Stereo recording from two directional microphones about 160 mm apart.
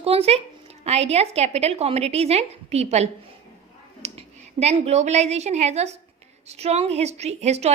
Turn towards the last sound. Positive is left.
turn(degrees=-45)  # may be behind; listen again after turning